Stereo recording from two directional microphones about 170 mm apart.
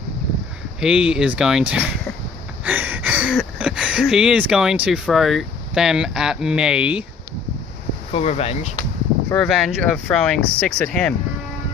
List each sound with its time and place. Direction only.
0.7 s speech: 5° right (ahead or behind)
8.1 s speech: 40° left (ahead or behind)
9.3 s speech: 5° left (ahead or behind)